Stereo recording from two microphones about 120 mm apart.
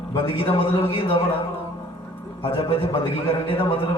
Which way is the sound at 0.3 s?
50° left (ahead or behind).